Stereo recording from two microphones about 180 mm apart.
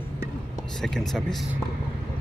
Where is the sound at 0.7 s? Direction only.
Centre (ahead or behind).